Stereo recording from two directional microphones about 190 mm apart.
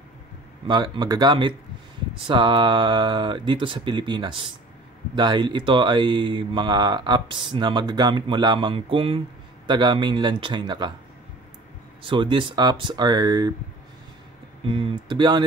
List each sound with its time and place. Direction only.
0.7 s speech: 25° right (ahead or behind)
12.0 s speech: 25° right (ahead or behind)
14.7 s speech: 25° right (ahead or behind)